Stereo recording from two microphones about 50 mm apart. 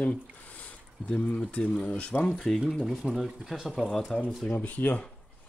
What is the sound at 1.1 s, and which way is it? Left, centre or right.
Speech, left.